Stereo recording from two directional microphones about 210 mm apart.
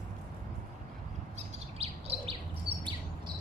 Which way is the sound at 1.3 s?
30° right (ahead or behind).